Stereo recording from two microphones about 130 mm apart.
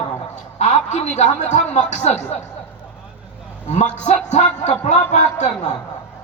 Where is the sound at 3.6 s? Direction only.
60° left (ahead or behind).